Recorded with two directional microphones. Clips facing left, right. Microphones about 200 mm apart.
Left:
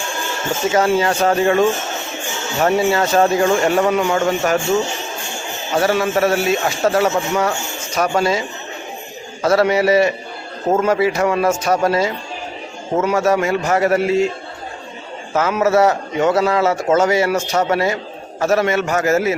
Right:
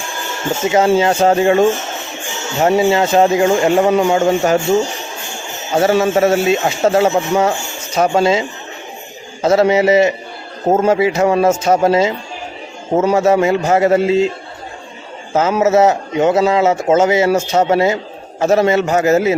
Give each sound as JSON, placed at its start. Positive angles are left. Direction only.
{"t": 0.9, "sound": "a man's voice", "side_deg": -25}
{"t": 5.7, "sound": "a man's voice", "side_deg": -25}
{"t": 13.1, "sound": "a man's voice", "side_deg": -20}
{"t": 15.3, "sound": "a man's voice", "side_deg": -25}